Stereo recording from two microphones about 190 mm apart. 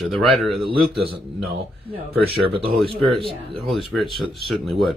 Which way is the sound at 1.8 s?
30° right (ahead or behind).